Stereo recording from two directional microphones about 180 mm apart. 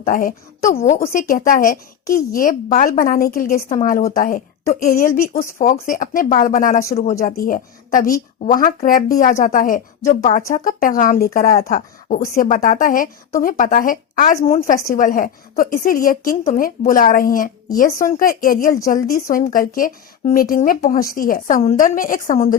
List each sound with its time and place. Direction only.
0.0 s a woman's voice: 50° left (ahead or behind)
5.3 s a woman's voice: 40° left (ahead or behind)
21.4 s a woman's voice: 35° left (ahead or behind)